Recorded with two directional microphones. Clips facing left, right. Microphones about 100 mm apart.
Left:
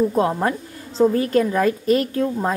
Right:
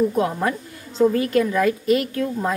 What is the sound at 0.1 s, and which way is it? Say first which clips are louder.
A woman's voice: left 2 dB; 35° left (ahead or behind).